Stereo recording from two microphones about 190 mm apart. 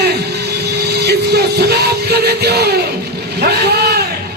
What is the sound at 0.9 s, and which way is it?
Music, 60° right (ahead or behind).